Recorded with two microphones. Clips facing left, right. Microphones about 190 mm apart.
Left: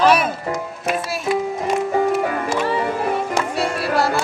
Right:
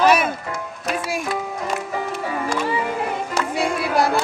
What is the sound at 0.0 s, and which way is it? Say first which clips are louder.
Music: left 1 dB; 10° right (ahead or behind).